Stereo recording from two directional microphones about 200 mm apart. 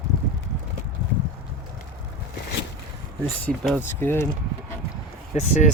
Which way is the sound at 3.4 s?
5° left (ahead or behind).